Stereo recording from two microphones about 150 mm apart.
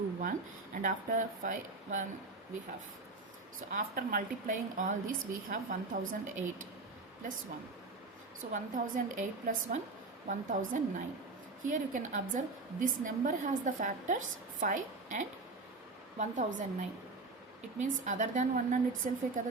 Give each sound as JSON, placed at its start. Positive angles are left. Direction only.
{"t": 0.2, "sound": "a woman's voice", "side_deg": -60}
{"t": 3.7, "sound": "a woman's voice", "side_deg": -65}
{"t": 8.5, "sound": "a woman's voice", "side_deg": -55}
{"t": 17.7, "sound": "a woman's voice", "side_deg": -55}